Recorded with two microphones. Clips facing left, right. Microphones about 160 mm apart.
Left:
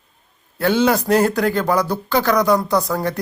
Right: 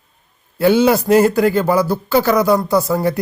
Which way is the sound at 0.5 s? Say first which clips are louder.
Right 4 dB; 10° right (ahead or behind).